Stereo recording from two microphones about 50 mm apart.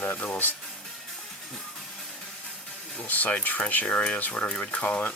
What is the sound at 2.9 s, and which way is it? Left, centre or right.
Speech, left.